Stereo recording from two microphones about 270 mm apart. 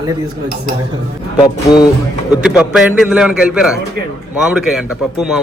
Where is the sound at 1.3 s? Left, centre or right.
Centre.